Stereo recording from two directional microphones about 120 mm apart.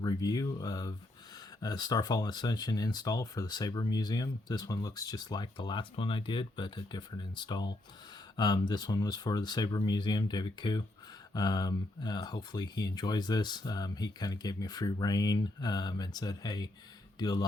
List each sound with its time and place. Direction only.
0.0 s speech: 30° left (ahead or behind)